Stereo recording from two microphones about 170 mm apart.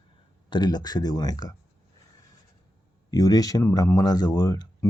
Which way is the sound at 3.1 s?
20° left (ahead or behind).